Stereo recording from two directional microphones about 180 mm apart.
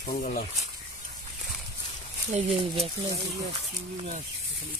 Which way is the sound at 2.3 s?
35° right (ahead or behind).